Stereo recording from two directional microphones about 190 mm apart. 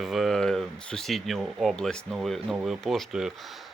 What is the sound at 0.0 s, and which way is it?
Speech, centre (ahead or behind).